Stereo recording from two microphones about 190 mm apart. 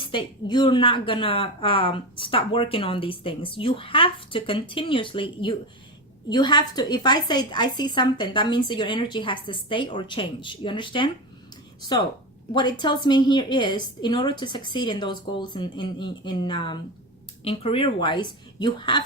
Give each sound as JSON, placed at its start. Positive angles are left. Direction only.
{"t": 0.0, "sound": "speech", "side_deg": 25}
{"t": 12.5, "sound": "speech", "side_deg": 25}